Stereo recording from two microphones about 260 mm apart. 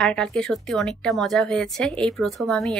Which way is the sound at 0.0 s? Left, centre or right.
Centre.